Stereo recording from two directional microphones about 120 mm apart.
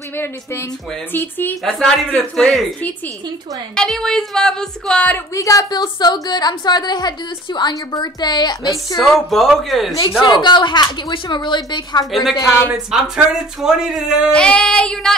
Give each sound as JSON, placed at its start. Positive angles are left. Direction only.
{"t": 0.2, "sound": "speech", "side_deg": 20}
{"t": 1.1, "sound": "child singing", "side_deg": 15}
{"t": 1.6, "sound": "a woman's voice", "side_deg": 5}
{"t": 5.3, "sound": "speech", "side_deg": 30}
{"t": 8.9, "sound": "a woman's voice", "side_deg": 0}
{"t": 10.4, "sound": "speech", "side_deg": 40}
{"t": 12.1, "sound": "a woman's voice", "side_deg": 0}
{"t": 14.3, "sound": "child singing", "side_deg": 5}